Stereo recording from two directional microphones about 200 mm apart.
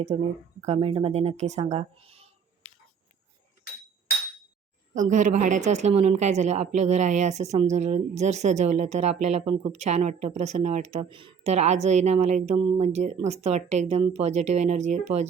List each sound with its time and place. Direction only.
0.1 s a woman's voice: 25° right (ahead or behind)
4.9 s a woman's voice: 40° right (ahead or behind)